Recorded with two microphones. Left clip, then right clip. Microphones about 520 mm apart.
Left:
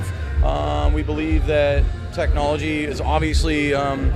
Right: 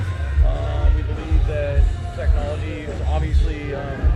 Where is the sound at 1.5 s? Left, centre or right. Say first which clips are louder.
Left 7 dB; left.